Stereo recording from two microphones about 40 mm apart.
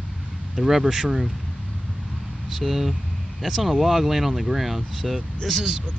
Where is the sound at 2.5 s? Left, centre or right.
Centre.